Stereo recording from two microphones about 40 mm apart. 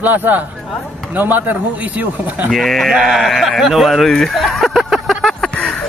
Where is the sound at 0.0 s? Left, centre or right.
Right.